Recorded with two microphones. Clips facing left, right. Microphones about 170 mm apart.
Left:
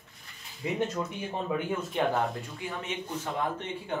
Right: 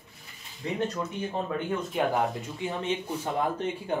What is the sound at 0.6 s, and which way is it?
Speech, 5° left (ahead or behind).